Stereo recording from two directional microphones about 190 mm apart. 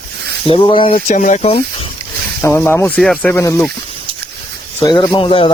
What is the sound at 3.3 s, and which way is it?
Speech, 15° left (ahead or behind).